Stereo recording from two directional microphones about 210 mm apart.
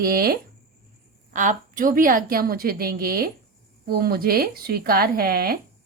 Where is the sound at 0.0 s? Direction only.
45° right (ahead or behind).